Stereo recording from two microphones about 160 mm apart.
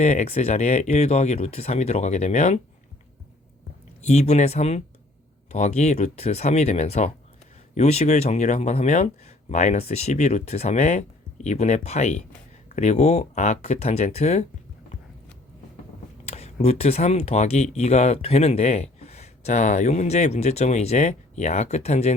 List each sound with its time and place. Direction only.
0.0 s speech: 45° left (ahead or behind)
4.0 s speech: 45° left (ahead or behind)
16.2 s speech: 40° left (ahead or behind)